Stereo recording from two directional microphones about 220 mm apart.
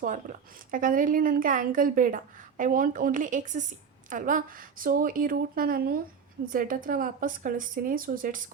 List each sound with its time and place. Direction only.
0.7 s a woman's voice: 40° right (ahead or behind)